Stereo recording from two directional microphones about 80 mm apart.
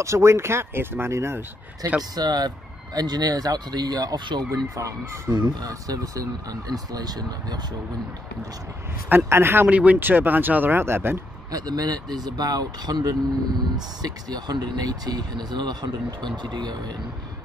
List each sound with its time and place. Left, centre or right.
0.0 s speech: right
1.8 s speech: right
4.5 s speech: right
5.3 s speech: right
5.7 s speech: right
9.1 s speech: right
9.7 s speech: centre
11.5 s speech: right